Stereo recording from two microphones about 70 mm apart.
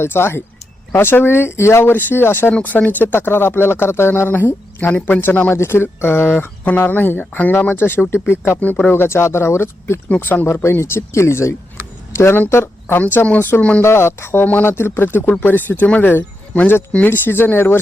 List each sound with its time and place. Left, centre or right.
0.0 s speech: left
2.5 s speech: left
5.5 s speech: left
13.0 s speech: left
13.8 s speech: left
14.4 s speech: left